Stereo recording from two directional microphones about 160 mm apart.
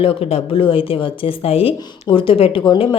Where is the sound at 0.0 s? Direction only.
40° left (ahead or behind).